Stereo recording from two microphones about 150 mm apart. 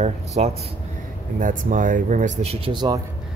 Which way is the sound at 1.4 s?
60° right (ahead or behind).